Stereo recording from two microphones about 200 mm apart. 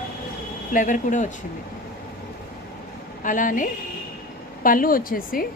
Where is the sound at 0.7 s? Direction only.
40° left (ahead or behind).